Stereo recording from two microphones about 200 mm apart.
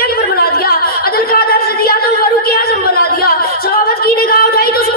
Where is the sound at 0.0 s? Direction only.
50° left (ahead or behind).